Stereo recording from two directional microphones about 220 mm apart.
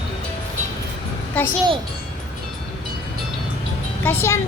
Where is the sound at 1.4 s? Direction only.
5° left (ahead or behind).